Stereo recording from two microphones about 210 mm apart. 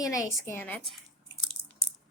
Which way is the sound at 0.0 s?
15° left (ahead or behind).